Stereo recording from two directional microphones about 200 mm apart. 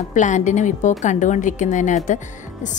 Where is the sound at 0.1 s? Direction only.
40° left (ahead or behind).